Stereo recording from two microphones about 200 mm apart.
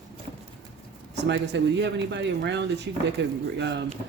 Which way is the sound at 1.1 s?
60° right (ahead or behind).